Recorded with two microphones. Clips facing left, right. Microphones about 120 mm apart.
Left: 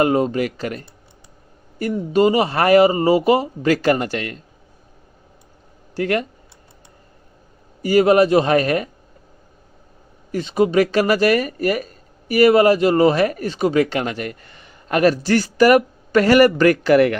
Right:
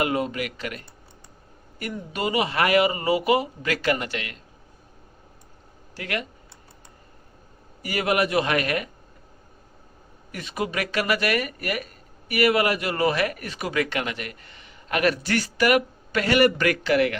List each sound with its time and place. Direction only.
0.0 s speech: 35° left (ahead or behind)
6.0 s speech: 40° left (ahead or behind)
7.8 s speech: 30° left (ahead or behind)
10.3 s speech: 30° left (ahead or behind); by 17.2 s 50° left (ahead or behind)